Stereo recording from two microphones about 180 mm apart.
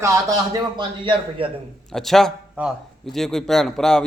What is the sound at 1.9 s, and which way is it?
A man's voice, centre (ahead or behind).